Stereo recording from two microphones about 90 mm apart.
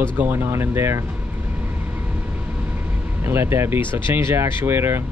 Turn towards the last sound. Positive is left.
turn(degrees=-25)  # may be behind; listen again after turning